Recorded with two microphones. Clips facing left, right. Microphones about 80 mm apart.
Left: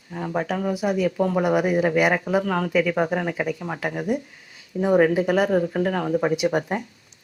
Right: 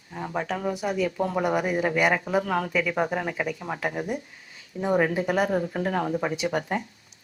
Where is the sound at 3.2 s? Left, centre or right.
Centre.